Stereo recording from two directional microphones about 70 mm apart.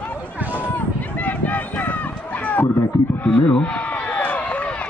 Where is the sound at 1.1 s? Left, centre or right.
Left.